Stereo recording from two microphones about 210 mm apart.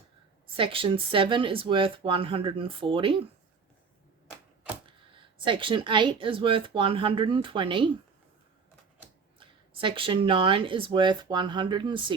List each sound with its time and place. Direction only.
0.5 s speech: 25° right (ahead or behind)
4.9 s speech: 25° right (ahead or behind)
9.4 s speech: 25° right (ahead or behind)